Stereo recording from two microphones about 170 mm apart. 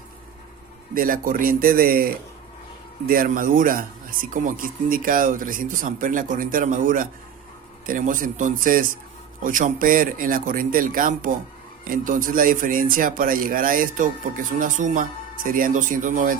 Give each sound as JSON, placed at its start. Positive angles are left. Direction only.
{"t": 0.9, "sound": "a man's voice", "side_deg": -55}